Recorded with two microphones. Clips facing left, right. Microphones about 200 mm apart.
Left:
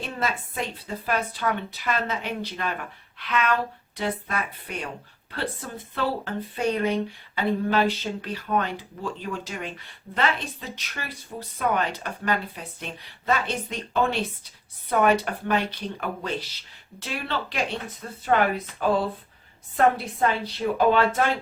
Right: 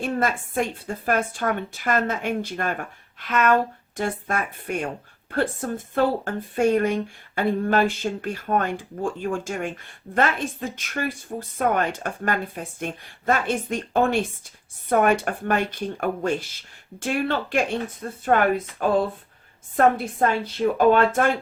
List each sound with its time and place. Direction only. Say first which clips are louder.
0.0 s a woman's voice: right 5 dB; 50° right (ahead or behind)
19.7 s a woman's voice: right 2 dB; 50° right (ahead or behind)